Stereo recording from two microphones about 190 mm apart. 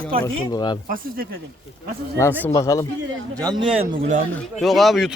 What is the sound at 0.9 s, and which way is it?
Speech, 50° right (ahead or behind).